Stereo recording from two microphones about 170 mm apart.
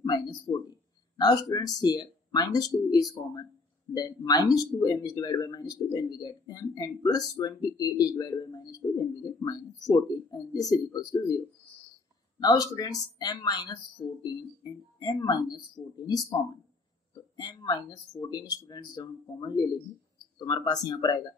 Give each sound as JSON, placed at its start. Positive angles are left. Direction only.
{"t": 0.0, "sound": "speech", "side_deg": 25}